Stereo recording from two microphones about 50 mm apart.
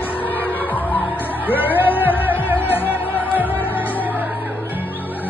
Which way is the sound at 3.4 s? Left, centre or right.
Left.